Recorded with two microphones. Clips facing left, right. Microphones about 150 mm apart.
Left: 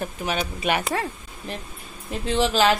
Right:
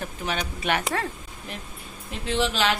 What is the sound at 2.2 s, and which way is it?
Speech, 35° left (ahead or behind).